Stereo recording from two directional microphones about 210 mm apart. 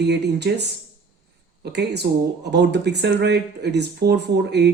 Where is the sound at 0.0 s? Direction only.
55° right (ahead or behind).